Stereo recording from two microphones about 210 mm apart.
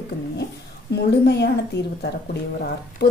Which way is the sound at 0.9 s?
50° left (ahead or behind).